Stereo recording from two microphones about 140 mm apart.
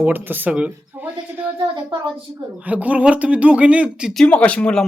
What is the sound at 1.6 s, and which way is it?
Speech, 35° right (ahead or behind).